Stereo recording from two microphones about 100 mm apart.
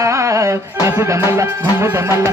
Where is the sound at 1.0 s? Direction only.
25° right (ahead or behind).